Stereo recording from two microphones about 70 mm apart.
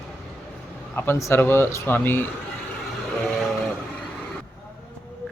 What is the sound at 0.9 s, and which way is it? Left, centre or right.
Speech, left.